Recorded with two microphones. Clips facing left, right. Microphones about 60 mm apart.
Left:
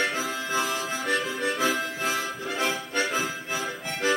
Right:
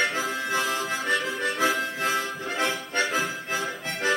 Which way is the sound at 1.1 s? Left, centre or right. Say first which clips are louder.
Left 1 dB; centre.